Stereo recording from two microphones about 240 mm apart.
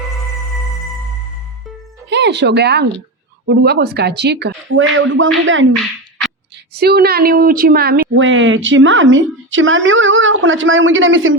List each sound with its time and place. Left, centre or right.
2.0 s a woman's voice: right
6.7 s a woman's voice: right
8.1 s a woman's voice: right